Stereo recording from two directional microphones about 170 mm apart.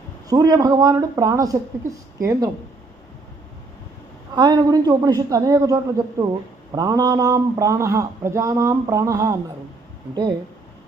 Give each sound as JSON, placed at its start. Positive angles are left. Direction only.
{"t": 0.3, "sound": "speech", "side_deg": -20}
{"t": 4.4, "sound": "a man's voice", "side_deg": -25}